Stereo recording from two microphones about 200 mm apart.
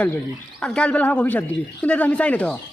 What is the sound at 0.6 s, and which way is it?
Speech, 5° left (ahead or behind).